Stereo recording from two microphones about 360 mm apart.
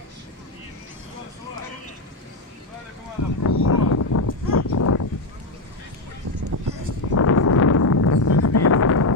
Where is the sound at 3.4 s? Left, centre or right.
Left.